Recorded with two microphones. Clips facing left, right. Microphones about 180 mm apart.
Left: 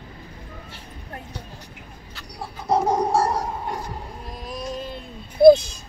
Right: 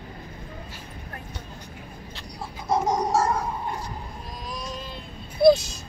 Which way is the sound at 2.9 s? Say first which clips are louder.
Left 2 dB; 30° left (ahead or behind).